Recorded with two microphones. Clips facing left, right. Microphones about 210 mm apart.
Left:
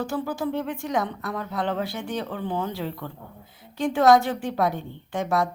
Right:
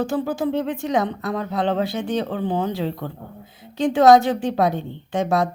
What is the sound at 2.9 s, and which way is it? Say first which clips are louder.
Speech: right 5 dB; 40° right (ahead or behind).